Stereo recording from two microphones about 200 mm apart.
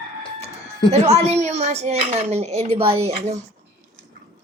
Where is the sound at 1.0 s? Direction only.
30° right (ahead or behind).